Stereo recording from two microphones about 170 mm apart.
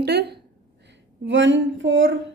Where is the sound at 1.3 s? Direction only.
90° right.